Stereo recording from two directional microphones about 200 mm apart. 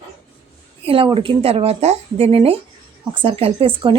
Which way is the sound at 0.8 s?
25° right (ahead or behind).